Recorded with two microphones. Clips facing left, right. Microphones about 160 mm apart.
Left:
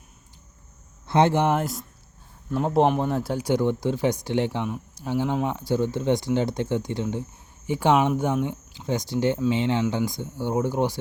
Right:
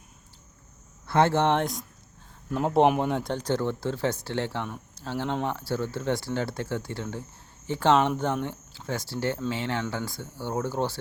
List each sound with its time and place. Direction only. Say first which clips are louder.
1.0 s speech: left 2 dB; 20° left (ahead or behind)